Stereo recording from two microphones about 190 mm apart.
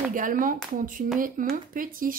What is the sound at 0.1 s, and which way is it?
Speech, 45° right (ahead or behind).